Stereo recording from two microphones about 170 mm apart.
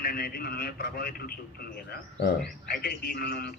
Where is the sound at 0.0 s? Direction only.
65° left (ahead or behind).